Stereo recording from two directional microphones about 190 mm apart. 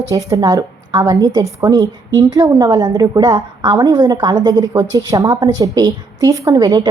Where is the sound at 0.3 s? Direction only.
20° right (ahead or behind).